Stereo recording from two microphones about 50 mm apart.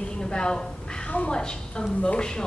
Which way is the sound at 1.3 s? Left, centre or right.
Centre.